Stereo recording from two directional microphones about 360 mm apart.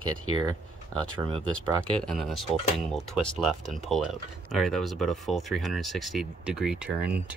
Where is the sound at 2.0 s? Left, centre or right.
Centre.